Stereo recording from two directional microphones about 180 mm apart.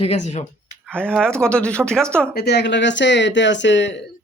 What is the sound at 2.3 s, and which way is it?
Speech, 65° left (ahead or behind).